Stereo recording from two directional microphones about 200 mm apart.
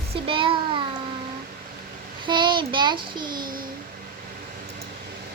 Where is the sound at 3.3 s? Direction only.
45° right (ahead or behind).